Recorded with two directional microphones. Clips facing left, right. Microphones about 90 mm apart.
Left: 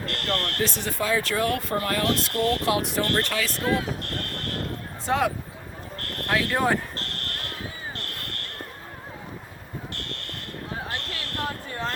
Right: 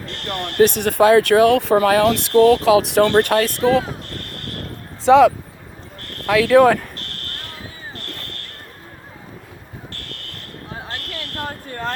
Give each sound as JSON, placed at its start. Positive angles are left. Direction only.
{"t": 0.0, "sound": "smoke detector", "side_deg": 0}
{"t": 0.6, "sound": "speech", "side_deg": -65}
{"t": 5.1, "sound": "speech", "side_deg": -90}
{"t": 6.4, "sound": "speech", "side_deg": -90}
{"t": 11.4, "sound": "a sound", "side_deg": -50}